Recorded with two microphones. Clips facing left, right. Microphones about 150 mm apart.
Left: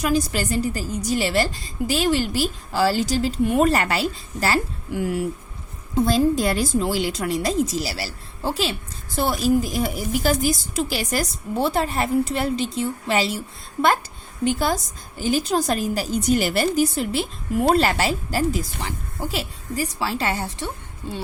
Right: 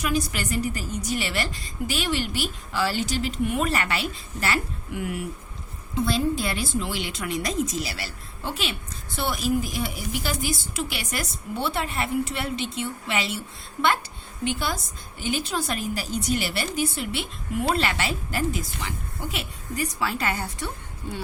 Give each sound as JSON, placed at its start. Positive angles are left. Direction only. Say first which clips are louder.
{"t": 0.0, "sound": "a woman's voice", "louder": "left 5 dB", "side_deg": 35}
{"t": 14.4, "sound": "a woman's voice", "louder": "left 6 dB", "side_deg": 40}